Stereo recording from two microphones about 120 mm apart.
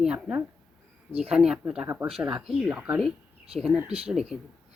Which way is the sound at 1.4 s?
5° right (ahead or behind).